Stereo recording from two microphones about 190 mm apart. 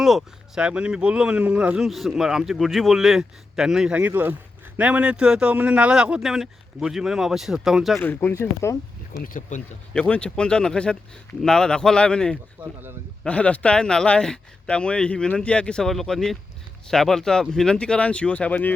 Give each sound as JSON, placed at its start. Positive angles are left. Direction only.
{"t": 0.0, "sound": "speech", "side_deg": 0}
{"t": 8.0, "sound": "speech", "side_deg": 10}
{"t": 9.1, "sound": "speech", "side_deg": 45}
{"t": 9.9, "sound": "speech", "side_deg": 5}
{"t": 12.6, "sound": "speech", "side_deg": -5}
{"t": 13.2, "sound": "speech", "side_deg": 5}